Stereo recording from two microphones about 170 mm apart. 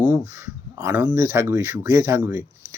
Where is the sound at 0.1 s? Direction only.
15° right (ahead or behind).